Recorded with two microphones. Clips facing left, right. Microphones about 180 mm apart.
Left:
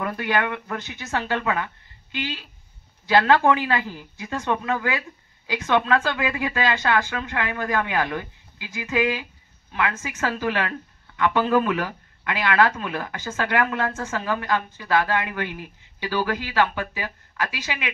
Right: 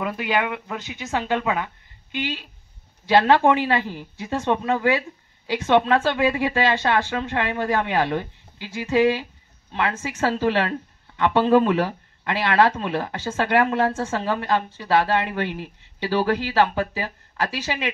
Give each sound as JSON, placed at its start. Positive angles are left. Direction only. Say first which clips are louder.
{"t": 0.0, "sound": "speech", "louder": "right 1 dB", "side_deg": -10}